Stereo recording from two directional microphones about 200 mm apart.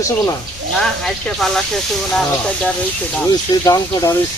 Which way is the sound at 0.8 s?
Centre (ahead or behind).